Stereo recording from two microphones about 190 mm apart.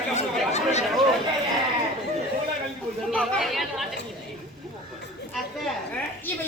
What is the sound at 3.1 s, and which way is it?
Chatter, 5° left (ahead or behind).